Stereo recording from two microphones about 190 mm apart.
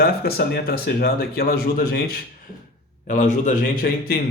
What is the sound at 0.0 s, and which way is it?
A man's voice, 55° left (ahead or behind).